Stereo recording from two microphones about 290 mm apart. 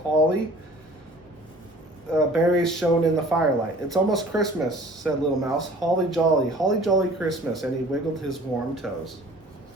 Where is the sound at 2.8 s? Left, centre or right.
Centre.